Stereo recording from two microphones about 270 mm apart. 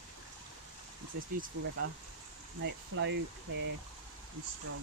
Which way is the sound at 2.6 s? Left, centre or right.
Right.